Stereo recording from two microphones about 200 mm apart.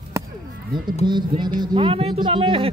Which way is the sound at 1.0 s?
20° right (ahead or behind).